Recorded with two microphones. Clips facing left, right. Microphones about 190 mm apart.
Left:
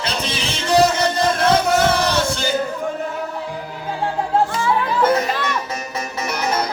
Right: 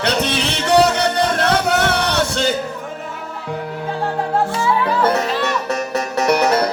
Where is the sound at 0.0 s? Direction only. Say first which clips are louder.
Right 6 dB; 65° right (ahead or behind).